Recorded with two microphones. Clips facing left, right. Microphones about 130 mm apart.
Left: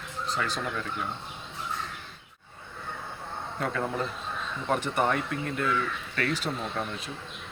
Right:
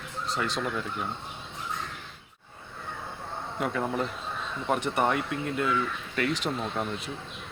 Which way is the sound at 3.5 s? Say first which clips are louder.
Right 1 dB; 10° right (ahead or behind).